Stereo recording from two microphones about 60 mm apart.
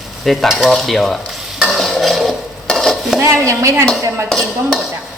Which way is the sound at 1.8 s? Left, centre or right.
Centre.